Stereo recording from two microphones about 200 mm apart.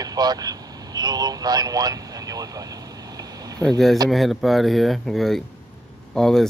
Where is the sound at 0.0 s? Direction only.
20° right (ahead or behind).